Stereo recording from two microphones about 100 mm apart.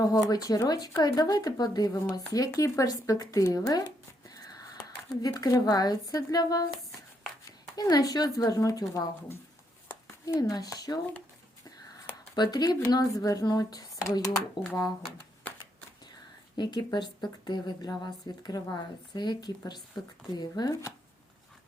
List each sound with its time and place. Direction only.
0.0 s speech: 40° left (ahead or behind)
5.2 s speech: 40° left (ahead or behind)
7.8 s speech: 40° left (ahead or behind)
10.4 s speech: 40° left (ahead or behind)
12.4 s speech: 40° left (ahead or behind)
16.6 s a woman's voice: 45° left (ahead or behind)